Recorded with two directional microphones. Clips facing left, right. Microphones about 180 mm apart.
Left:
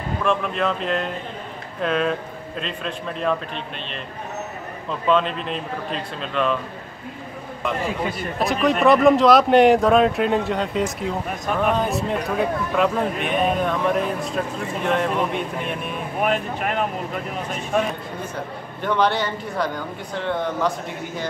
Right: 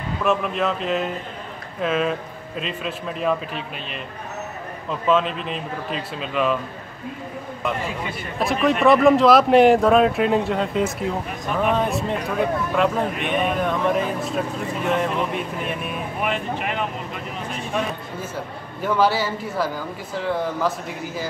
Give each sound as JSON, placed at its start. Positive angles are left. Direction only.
{"t": 0.2, "sound": "speech", "side_deg": -5}
{"t": 5.0, "sound": "speech", "side_deg": 0}
{"t": 8.4, "sound": "speech", "side_deg": 0}
{"t": 16.2, "sound": "speech", "side_deg": 45}
{"t": 18.3, "sound": "speech", "side_deg": -5}